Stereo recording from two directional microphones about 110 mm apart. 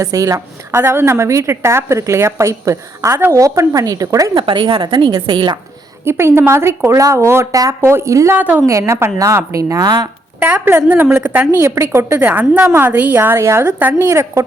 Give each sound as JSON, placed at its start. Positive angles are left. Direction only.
{"t": 0.0, "sound": "a woman's voice", "side_deg": -30}
{"t": 4.4, "sound": "a woman's voice", "side_deg": -50}
{"t": 6.1, "sound": "a woman's voice", "side_deg": -20}
{"t": 8.4, "sound": "a woman's voice", "side_deg": -15}
{"t": 8.6, "sound": "a woman's voice", "side_deg": -25}
{"t": 10.4, "sound": "a woman's voice", "side_deg": -15}
{"t": 11.6, "sound": "a woman's voice", "side_deg": -25}
{"t": 14.1, "sound": "a woman's voice", "side_deg": -30}